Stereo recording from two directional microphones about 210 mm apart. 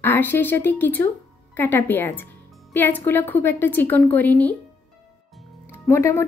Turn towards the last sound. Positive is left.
turn(degrees=10)  # may be behind; listen again after turning